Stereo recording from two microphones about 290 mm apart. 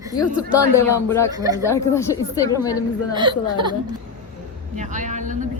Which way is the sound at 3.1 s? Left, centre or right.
Centre.